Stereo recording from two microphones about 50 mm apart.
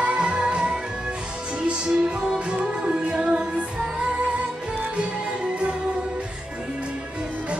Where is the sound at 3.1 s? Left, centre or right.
Centre.